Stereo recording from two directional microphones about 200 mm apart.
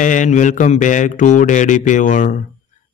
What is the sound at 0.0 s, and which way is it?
A man's voice, 40° left (ahead or behind).